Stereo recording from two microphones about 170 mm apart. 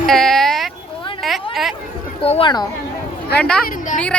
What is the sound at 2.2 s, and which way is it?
Speech, 35° left (ahead or behind).